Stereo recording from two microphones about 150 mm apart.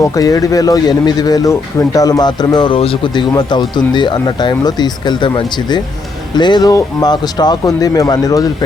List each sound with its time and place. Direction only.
0.0 s speech: 25° left (ahead or behind)